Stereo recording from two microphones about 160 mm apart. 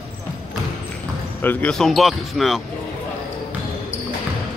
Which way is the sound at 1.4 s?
5° left (ahead or behind).